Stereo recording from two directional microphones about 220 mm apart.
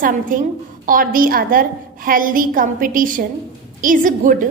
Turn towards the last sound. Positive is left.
turn(degrees=-35)  # may be behind; listen again after turning